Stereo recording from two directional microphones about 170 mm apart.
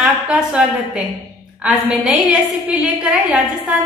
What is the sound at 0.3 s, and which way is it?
A woman's voice, 5° right (ahead or behind).